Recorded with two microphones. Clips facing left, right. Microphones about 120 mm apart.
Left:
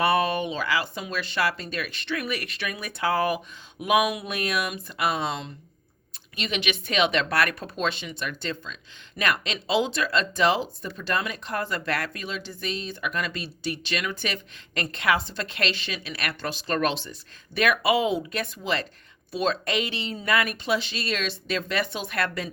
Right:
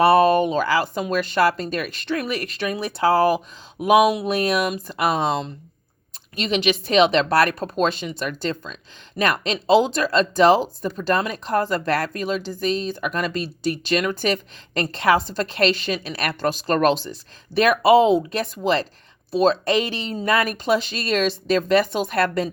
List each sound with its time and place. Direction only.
0.0 s speech: 35° right (ahead or behind)